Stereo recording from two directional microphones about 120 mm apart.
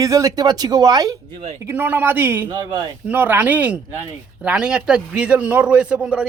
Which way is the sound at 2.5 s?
35° right (ahead or behind).